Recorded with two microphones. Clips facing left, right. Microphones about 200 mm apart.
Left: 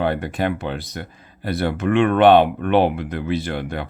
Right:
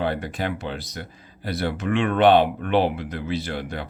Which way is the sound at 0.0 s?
55° left (ahead or behind).